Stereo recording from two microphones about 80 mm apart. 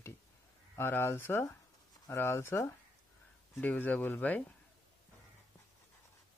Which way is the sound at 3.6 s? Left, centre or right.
Centre.